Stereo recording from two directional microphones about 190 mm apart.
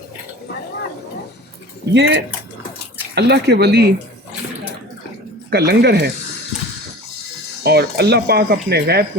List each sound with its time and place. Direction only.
1.9 s speech: 65° right (ahead or behind)
5.5 s speech: 60° right (ahead or behind)
7.6 s speech: 60° right (ahead or behind)